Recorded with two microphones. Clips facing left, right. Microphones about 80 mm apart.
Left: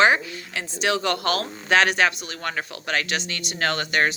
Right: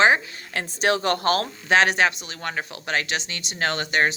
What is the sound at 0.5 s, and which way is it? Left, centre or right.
Speech, right.